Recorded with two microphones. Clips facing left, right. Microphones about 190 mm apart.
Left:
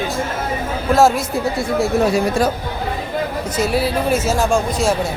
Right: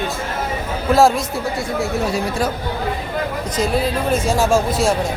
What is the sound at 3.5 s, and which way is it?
Speech, 10° left (ahead or behind).